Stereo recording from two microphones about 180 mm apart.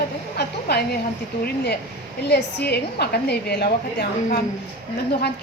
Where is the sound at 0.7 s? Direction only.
65° left (ahead or behind).